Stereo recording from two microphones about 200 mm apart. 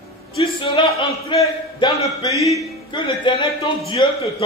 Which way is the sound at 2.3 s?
15° right (ahead or behind).